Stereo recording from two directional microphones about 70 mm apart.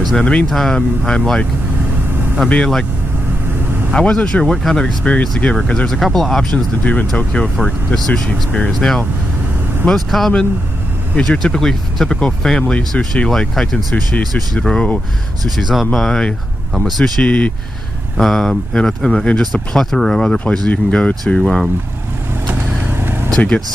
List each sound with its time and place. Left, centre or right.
0.1 s speech: centre
0.5 s speech: centre
2.5 s speech: centre
3.9 s speech: centre
6.5 s speech: left
7.6 s speech: centre
15.5 s speech: centre
17.2 s speech: centre
18.1 s speech: centre
23.3 s speech: centre